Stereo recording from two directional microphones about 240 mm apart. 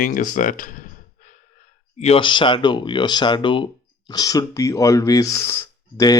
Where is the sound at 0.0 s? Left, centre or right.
Left.